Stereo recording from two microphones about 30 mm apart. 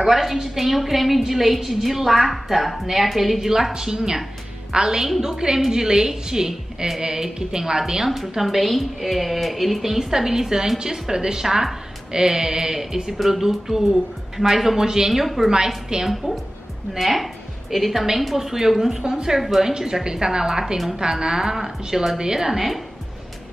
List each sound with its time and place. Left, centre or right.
0.0 s a woman's voice: centre
3.7 s a woman's voice: right
8.1 s a woman's voice: centre
15.2 s a woman's voice: centre
15.9 s a woman's voice: right
17.0 s a woman's voice: centre